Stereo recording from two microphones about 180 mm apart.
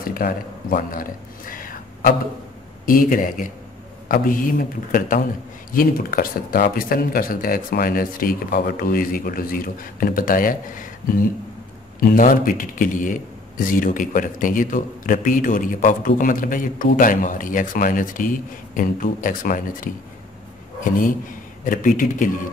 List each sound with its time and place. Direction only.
0.0 s a man's voice: 55° left (ahead or behind)